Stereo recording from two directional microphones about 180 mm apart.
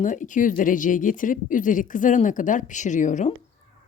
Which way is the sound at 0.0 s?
45° left (ahead or behind).